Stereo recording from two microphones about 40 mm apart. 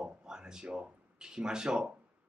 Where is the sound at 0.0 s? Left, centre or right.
Centre.